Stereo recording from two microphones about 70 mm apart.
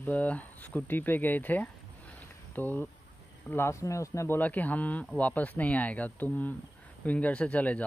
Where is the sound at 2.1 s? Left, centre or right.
Left.